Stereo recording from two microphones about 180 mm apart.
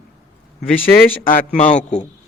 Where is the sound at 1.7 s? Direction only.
40° left (ahead or behind).